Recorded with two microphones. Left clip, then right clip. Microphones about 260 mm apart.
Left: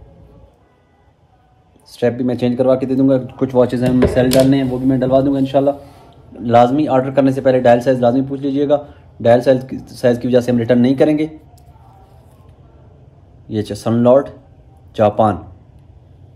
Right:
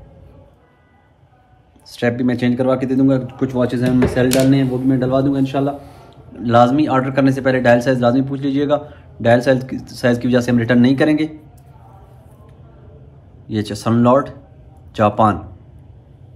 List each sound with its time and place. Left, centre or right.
2.0 s speech: centre
3.3 s speech: left
6.3 s a man's voice: centre
13.5 s a man's voice: centre